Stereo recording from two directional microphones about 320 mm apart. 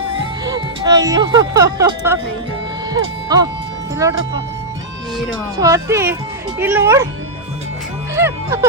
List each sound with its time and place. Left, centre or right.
0.4 s speech: centre
3.3 s speech: centre
5.5 s speech: centre
8.1 s speech: centre